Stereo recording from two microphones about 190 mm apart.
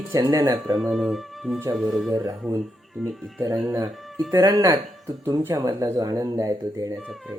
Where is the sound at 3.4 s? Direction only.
15° right (ahead or behind).